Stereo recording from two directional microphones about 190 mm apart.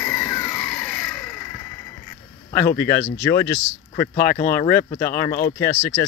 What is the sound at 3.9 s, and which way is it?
Speech, 50° left (ahead or behind).